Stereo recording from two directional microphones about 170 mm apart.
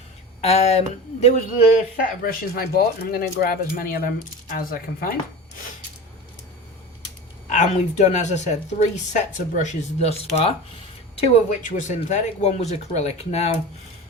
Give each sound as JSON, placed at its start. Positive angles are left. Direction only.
{"t": 0.4, "sound": "speech", "side_deg": 40}
{"t": 2.0, "sound": "speech", "side_deg": 60}
{"t": 7.5, "sound": "speech", "side_deg": 45}